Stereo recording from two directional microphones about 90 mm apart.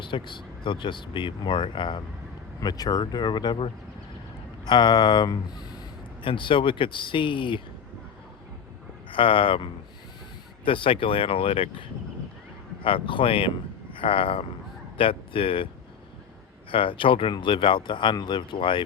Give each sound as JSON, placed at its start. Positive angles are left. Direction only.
{"t": 0.0, "sound": "speech", "side_deg": 60}
{"t": 2.6, "sound": "speech", "side_deg": 45}
{"t": 4.6, "sound": "speech", "side_deg": 55}
{"t": 6.2, "sound": "speech", "side_deg": 70}
{"t": 9.0, "sound": "speech", "side_deg": 80}
{"t": 10.7, "sound": "speech", "side_deg": 75}
{"t": 12.8, "sound": "speech", "side_deg": 75}
{"t": 16.7, "sound": "speech", "side_deg": 75}
{"t": 17.3, "sound": "speech", "side_deg": 65}